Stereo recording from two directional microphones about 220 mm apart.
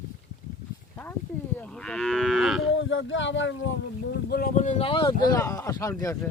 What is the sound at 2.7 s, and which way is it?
Speech, 60° left (ahead or behind).